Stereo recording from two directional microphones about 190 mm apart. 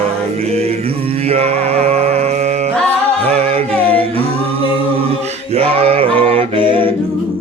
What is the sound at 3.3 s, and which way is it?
Singing, 30° right (ahead or behind).